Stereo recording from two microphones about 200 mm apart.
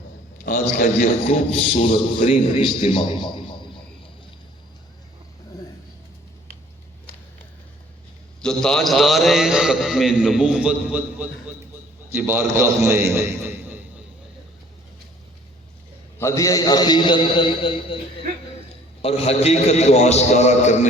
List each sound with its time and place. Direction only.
0.4 s a man's voice: 40° left (ahead or behind); by 3.4 s 25° left (ahead or behind)
8.4 s a man's voice: 5° left (ahead or behind)
16.1 s a man's voice: 15° left (ahead or behind)
19.0 s a man's voice: 30° left (ahead or behind)